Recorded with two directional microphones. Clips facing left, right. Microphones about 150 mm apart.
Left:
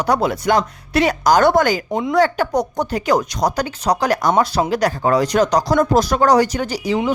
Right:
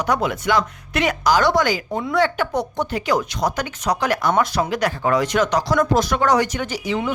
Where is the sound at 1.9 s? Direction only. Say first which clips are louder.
Left 4 dB; 20° left (ahead or behind).